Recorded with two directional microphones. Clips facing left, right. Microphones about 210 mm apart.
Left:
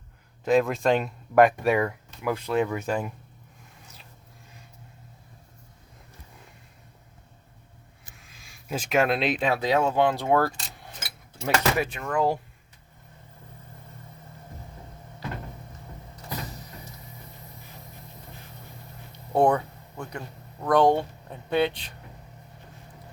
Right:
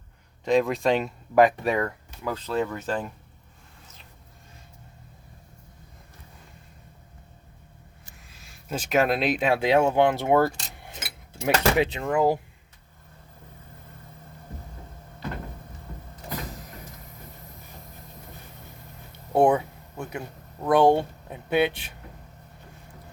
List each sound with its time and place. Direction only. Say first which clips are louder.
0.4 s speech: even; centre (ahead or behind)
8.7 s speech: right 1 dB; centre (ahead or behind)
9.6 s speech: right 4 dB; 20° right (ahead or behind)
19.3 s speech: right 2 dB; 10° right (ahead or behind)